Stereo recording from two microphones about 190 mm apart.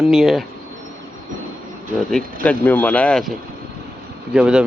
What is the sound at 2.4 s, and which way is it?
Speech, 10° left (ahead or behind).